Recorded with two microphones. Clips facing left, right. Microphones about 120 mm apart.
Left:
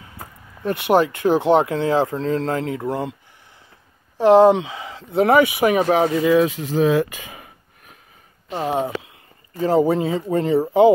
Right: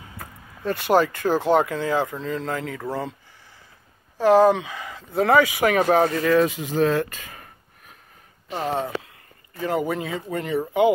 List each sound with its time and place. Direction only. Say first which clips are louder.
0.2 s speech: left 3 dB; 20° left (ahead or behind)
4.2 s speech: left 4 dB; 25° left (ahead or behind)
5.9 s speech: left 2 dB; 5° left (ahead or behind)
6.4 s a sound: left 2 dB; centre (ahead or behind)
8.5 s speech: left 3 dB; 10° left (ahead or behind)
9.6 s speech: left 7 dB; 30° left (ahead or behind)